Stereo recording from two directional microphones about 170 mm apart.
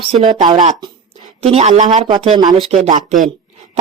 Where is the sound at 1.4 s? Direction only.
35° right (ahead or behind).